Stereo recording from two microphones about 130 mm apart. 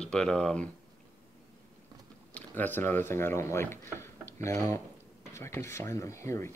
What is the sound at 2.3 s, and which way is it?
Speech, 15° left (ahead or behind).